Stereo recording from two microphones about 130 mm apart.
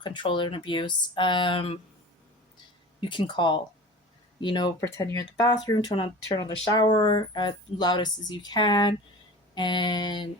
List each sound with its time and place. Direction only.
0.0 s speech: 35° left (ahead or behind)
3.0 s speech: 35° left (ahead or behind)
4.8 s speech: 25° left (ahead or behind)